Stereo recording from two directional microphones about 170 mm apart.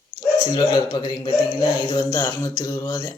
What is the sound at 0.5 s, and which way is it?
Speech, 25° left (ahead or behind).